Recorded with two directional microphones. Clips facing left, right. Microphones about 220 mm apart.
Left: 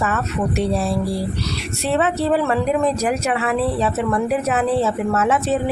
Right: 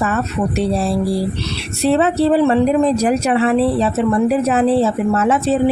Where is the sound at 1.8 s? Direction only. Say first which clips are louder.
Right 5 dB; 30° right (ahead or behind).